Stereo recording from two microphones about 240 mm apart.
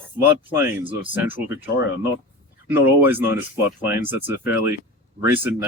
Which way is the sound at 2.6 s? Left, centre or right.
Centre.